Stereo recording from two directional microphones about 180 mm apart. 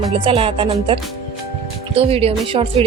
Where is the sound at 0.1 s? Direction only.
30° right (ahead or behind).